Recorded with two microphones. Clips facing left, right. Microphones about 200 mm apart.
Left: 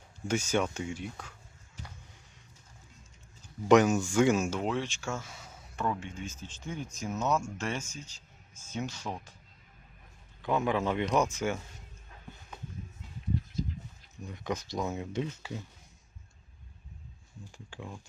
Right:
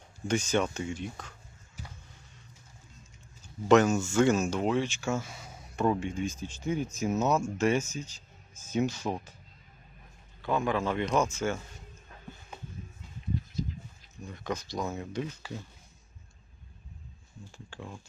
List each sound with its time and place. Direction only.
0.3 s speech: 10° left (ahead or behind)
3.7 s speech: 15° left (ahead or behind)
4.6 s speech: 5° right (ahead or behind)
10.4 s speech: 20° left (ahead or behind)
14.3 s speech: 20° left (ahead or behind)
14.8 s speech: 5° left (ahead or behind)
15.1 s speech: 20° left (ahead or behind)